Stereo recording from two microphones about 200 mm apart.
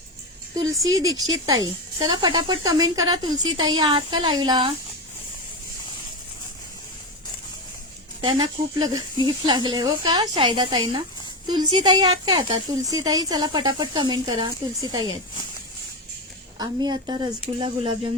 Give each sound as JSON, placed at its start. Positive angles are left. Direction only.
{"t": 1.0, "sound": "speech", "side_deg": -20}
{"t": 8.2, "sound": "speech", "side_deg": -25}
{"t": 16.6, "sound": "speech", "side_deg": -20}